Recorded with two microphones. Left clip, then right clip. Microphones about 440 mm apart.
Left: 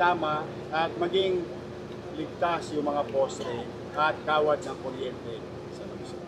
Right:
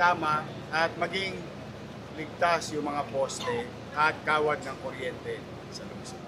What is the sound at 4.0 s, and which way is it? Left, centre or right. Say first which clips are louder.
Speech: even; right.